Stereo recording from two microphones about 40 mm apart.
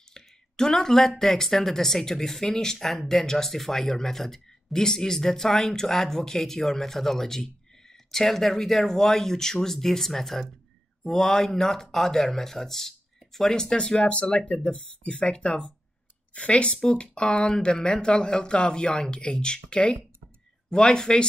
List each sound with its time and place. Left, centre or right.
0.1 s speech: centre